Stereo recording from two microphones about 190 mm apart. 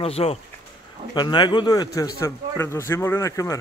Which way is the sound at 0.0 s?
30° left (ahead or behind).